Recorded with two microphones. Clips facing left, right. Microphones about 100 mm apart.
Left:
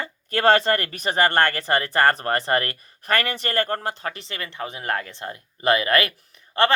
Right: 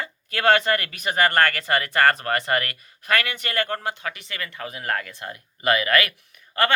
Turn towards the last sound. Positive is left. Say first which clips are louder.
# left 3 dB
turn(degrees=30)  # may be behind; listen again after turning